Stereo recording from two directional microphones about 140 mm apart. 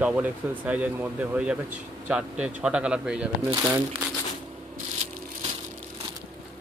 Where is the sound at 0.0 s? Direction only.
10° right (ahead or behind).